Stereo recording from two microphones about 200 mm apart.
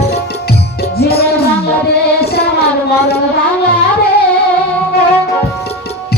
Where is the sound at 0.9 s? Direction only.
50° left (ahead or behind).